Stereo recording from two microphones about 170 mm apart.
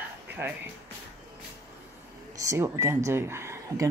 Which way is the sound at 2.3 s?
20° right (ahead or behind).